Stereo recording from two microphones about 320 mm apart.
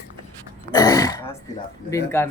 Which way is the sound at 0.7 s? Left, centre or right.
Centre.